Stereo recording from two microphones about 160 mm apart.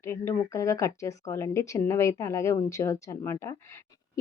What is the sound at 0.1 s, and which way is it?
Speech, 15° left (ahead or behind).